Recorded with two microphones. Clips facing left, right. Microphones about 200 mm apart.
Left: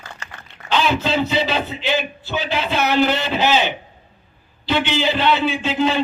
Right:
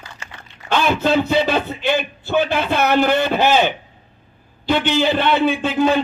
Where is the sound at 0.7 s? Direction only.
55° right (ahead or behind).